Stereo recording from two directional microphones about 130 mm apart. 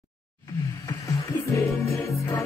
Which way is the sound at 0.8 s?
25° left (ahead or behind).